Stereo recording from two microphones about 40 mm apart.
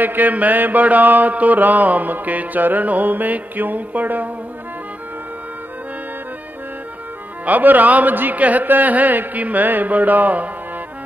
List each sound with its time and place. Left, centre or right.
0.0 s speech: right
7.4 s speech: right